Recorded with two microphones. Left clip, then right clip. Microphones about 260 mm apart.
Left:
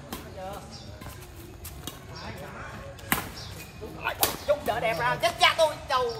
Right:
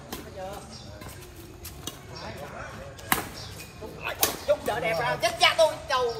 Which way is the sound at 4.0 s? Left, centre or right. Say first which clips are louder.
Even; centre.